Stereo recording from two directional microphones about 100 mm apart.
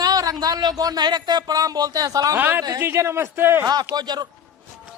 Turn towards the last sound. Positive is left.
turn(degrees=-45)  # may be behind; listen again after turning